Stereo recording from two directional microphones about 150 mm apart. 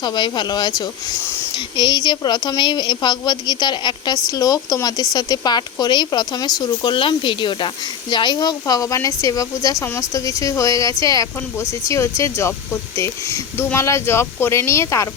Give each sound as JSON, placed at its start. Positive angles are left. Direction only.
{"t": 0.0, "sound": "a woman's voice", "side_deg": 30}